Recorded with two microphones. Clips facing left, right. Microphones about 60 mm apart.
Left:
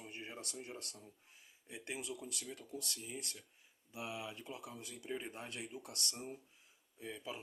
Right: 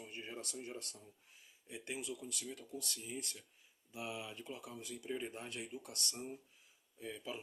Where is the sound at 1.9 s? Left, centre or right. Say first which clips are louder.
Even; left.